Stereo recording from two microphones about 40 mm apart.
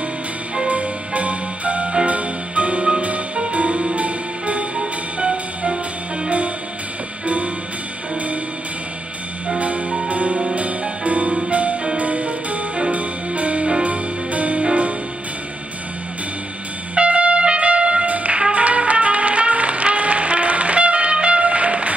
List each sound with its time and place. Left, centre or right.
0.7 s music: right
9.6 s music: right
16.9 s trumpet: right
18.4 s music: right